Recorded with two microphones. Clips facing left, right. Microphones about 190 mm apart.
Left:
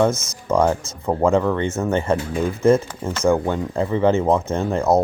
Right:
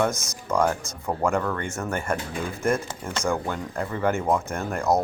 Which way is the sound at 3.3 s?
20° left (ahead or behind).